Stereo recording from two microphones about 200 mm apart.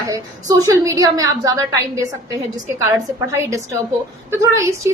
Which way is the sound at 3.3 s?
15° right (ahead or behind).